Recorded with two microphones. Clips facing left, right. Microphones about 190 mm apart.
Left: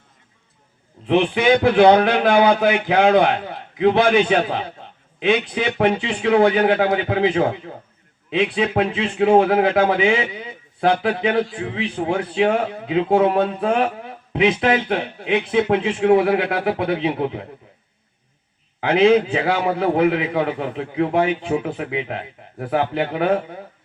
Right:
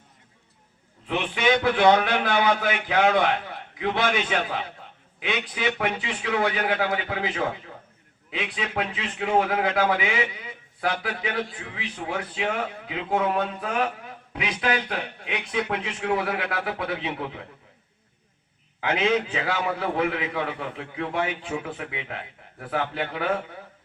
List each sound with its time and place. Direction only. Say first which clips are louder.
1.0 s a man's voice: left 8 dB; 30° left (ahead or behind)
18.8 s a man's voice: left 9 dB; 30° left (ahead or behind)